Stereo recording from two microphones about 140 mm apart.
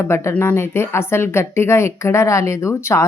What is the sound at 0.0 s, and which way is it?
Speech, 20° left (ahead or behind).